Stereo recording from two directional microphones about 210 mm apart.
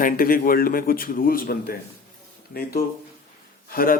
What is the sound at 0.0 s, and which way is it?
A man's voice, 45° left (ahead or behind).